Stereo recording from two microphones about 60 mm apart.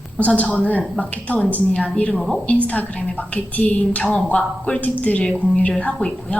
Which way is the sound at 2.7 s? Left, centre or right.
Left.